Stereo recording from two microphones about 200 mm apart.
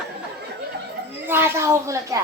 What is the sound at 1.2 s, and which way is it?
Speech, 10° right (ahead or behind).